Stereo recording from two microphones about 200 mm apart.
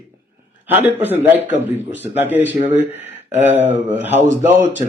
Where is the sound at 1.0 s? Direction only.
10° right (ahead or behind).